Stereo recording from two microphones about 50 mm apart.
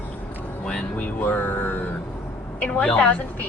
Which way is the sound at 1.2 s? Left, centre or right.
Left.